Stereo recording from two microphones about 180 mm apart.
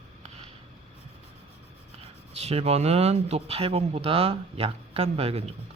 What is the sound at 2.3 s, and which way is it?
Speech, 35° right (ahead or behind).